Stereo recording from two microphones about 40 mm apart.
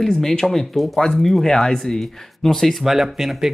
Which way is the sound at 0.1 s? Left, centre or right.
Centre.